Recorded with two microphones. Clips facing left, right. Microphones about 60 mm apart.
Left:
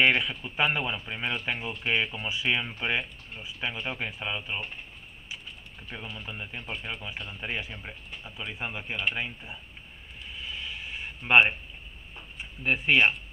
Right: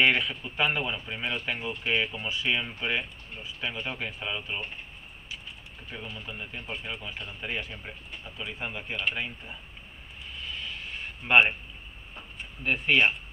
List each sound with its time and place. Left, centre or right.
0.0 s speech: centre
2.2 s speech: centre
5.9 s speech: centre
10.4 s a sound: centre
12.4 s speech: centre